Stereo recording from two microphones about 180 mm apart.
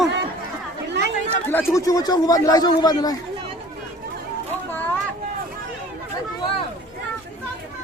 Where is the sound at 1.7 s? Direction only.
20° left (ahead or behind).